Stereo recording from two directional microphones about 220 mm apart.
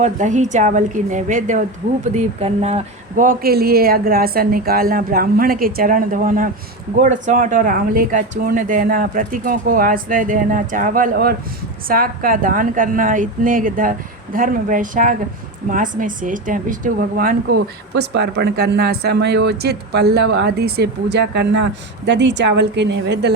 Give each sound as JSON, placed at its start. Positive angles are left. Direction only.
{"t": 0.0, "sound": "a woman's voice", "side_deg": -35}